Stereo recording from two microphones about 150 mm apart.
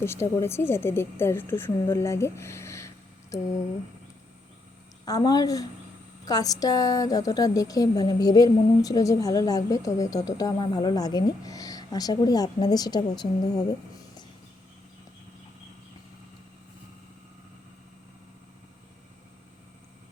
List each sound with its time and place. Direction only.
0.0 s a woman's voice: 15° left (ahead or behind)
5.0 s a woman's voice: 25° left (ahead or behind)